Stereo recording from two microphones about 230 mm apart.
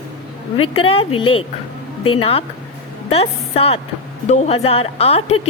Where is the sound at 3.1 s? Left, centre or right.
Left.